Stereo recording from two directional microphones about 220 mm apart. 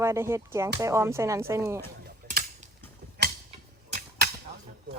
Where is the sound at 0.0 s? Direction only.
10° right (ahead or behind).